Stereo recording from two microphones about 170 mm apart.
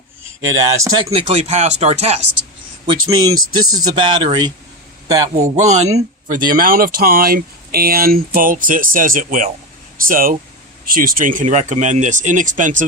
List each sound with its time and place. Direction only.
0.4 s speech: 20° right (ahead or behind)
1.1 s a man's voice: 35° right (ahead or behind); by 5.3 s 20° right (ahead or behind)
5.3 s speech: 40° right (ahead or behind)